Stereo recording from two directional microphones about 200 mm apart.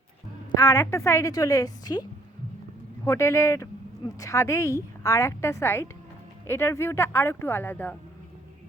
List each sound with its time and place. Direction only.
0.5 s a woman's voice: 15° left (ahead or behind)